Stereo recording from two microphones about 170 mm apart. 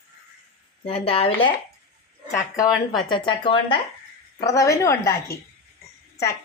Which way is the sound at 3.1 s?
30° left (ahead or behind).